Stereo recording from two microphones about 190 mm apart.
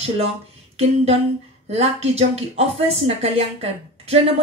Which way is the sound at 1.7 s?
35° right (ahead or behind).